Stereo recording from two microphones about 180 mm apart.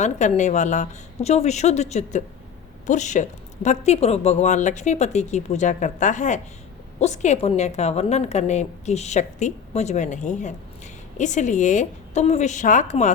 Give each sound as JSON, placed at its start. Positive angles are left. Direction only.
{"t": 0.0, "sound": "speech", "side_deg": 40}